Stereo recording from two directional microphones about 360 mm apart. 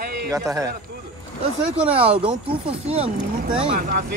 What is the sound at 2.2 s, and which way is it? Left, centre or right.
Speech, centre.